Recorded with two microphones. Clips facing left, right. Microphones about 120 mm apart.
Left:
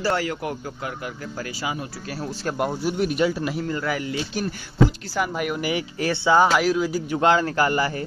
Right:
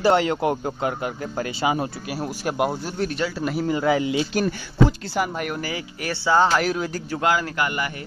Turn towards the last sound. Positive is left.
turn(degrees=35)  # may be behind; listen again after turning